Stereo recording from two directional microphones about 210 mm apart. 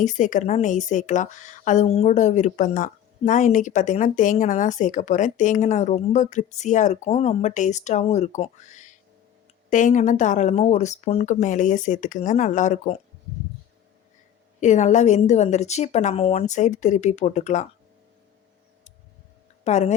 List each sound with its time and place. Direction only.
0.0 s a woman's voice: 35° left (ahead or behind)
14.6 s a woman's voice: 35° left (ahead or behind)
19.6 s speech: 30° left (ahead or behind)